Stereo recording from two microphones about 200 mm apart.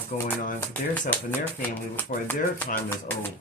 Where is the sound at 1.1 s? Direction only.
10° left (ahead or behind).